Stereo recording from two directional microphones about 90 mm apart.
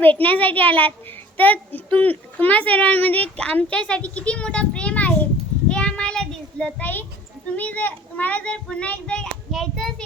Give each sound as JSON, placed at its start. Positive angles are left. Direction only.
{"t": 0.0, "sound": "a child's voice", "side_deg": 20}
{"t": 5.6, "sound": "child singing", "side_deg": 10}
{"t": 7.5, "sound": "a child's voice", "side_deg": 15}
{"t": 9.5, "sound": "a child's voice", "side_deg": 0}